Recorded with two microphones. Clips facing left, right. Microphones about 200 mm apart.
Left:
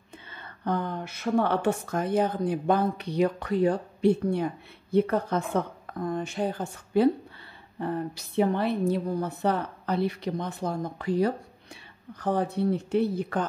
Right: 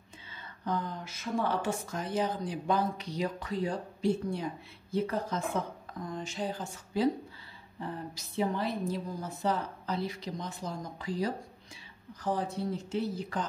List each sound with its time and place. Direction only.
0.3 s a woman's voice: 60° left (ahead or behind)